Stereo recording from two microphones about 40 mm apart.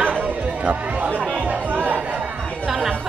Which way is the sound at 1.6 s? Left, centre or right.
Right.